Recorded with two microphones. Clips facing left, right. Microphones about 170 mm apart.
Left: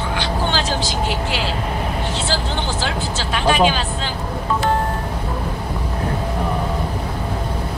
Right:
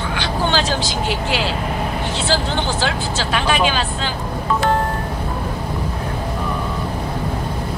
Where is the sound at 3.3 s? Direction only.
90° right.